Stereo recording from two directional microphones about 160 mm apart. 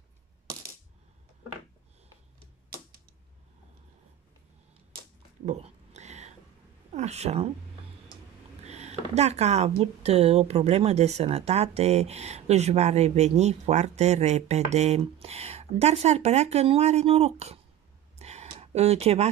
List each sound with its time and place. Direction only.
5.4 s whispering: 45° right (ahead or behind)
6.9 s speech: 45° right (ahead or behind)
8.6 s speech: 45° right (ahead or behind)
18.2 s a sound: 45° right (ahead or behind)